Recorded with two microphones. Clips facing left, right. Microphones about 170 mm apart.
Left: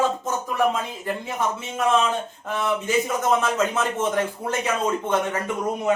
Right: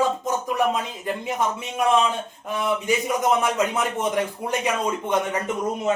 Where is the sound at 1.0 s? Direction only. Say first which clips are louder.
Right 1 dB; 15° right (ahead or behind).